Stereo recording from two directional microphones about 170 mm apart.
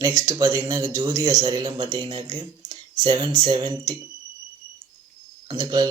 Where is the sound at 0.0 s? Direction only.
20° right (ahead or behind).